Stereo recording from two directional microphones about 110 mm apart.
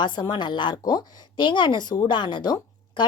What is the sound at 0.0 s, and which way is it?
Speech, 45° left (ahead or behind).